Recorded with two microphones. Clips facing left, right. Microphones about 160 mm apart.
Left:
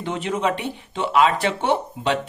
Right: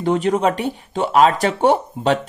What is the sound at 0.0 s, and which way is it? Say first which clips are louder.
Speech: right 7 dB; 40° right (ahead or behind).